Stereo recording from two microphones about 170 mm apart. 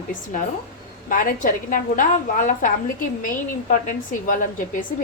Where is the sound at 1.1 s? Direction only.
55° left (ahead or behind).